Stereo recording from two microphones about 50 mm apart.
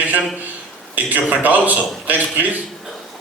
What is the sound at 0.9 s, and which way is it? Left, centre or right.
A man's voice, right.